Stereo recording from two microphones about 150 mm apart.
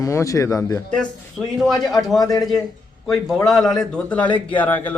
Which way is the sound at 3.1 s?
Centre (ahead or behind).